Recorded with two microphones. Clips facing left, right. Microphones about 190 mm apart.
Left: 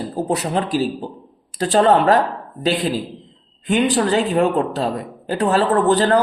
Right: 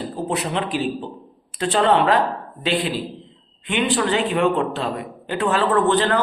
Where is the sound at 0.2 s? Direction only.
40° left (ahead or behind).